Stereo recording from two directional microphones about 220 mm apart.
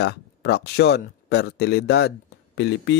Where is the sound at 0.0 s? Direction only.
50° left (ahead or behind).